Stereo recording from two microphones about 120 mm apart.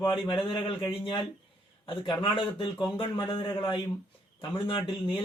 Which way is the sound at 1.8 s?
40° left (ahead or behind).